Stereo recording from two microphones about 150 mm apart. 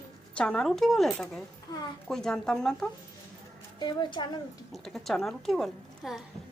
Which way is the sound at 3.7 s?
30° left (ahead or behind).